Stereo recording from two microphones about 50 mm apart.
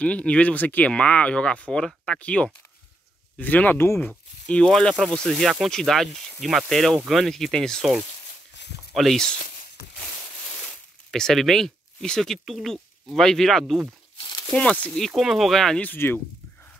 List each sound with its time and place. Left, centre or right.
0.0 s speech: left
3.7 s speech: left
4.6 s speech: centre
5.4 s speech: centre
5.7 s speech: centre
8.9 s speech: centre
11.1 s speech: centre
12.4 s speech: centre
14.5 s speech: left
15.1 s speech: centre
16.0 s speech: left